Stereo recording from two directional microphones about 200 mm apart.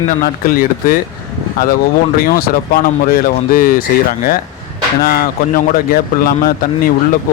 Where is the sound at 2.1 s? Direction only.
45° left (ahead or behind).